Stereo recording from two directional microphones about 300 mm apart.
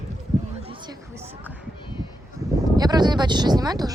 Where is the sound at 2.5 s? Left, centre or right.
Centre.